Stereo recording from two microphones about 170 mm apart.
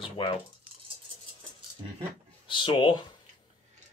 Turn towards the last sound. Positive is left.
turn(degrees=25)  # may be behind; listen again after turning